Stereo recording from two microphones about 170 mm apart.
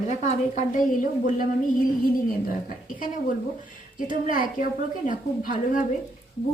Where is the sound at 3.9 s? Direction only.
50° left (ahead or behind).